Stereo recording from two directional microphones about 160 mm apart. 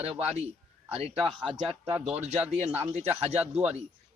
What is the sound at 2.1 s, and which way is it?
Speech, 45° right (ahead or behind).